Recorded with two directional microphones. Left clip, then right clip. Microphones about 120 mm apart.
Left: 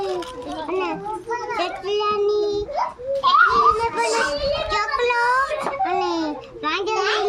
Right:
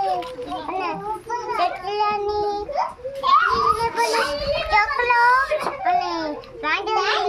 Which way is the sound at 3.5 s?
25° right (ahead or behind).